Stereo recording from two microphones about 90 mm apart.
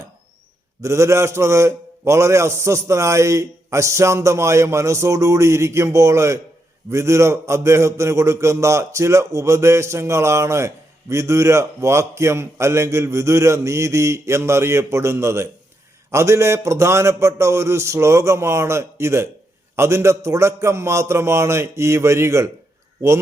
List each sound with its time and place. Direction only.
0.8 s a man's voice: 35° right (ahead or behind)